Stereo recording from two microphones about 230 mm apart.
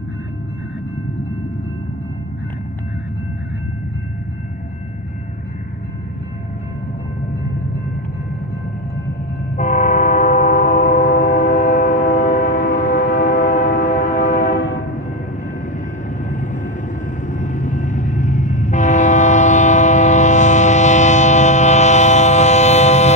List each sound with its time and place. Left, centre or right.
9.6 s train: left
13.8 s music: left
14.4 s train horn: left
16.2 s vehicle: left
17.3 s train: left